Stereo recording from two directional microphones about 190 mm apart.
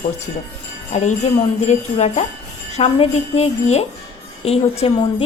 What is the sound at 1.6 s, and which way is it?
A woman's voice, 35° left (ahead or behind).